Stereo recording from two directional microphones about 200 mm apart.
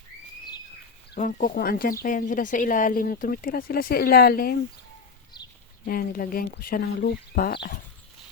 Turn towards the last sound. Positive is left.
turn(degrees=50)  # may be behind; listen again after turning